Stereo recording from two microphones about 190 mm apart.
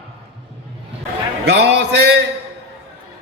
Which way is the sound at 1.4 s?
60° right (ahead or behind).